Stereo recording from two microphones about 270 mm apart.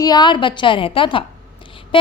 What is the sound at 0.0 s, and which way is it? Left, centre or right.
A woman's voice, centre.